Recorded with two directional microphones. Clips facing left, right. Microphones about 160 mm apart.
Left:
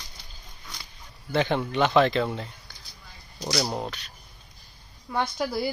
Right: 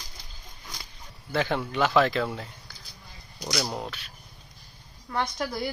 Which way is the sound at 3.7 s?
10° left (ahead or behind).